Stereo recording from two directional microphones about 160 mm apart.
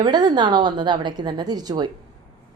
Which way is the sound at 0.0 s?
25° right (ahead or behind).